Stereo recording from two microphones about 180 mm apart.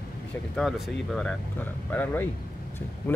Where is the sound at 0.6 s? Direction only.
Centre (ahead or behind).